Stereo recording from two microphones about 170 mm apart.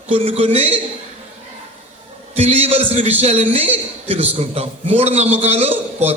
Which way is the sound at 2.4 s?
35° right (ahead or behind).